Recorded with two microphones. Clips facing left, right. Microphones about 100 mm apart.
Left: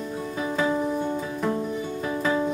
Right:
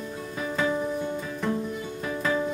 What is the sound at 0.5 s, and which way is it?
Music, 10° left (ahead or behind).